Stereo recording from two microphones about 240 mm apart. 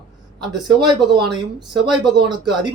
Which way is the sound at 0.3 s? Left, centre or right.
Centre.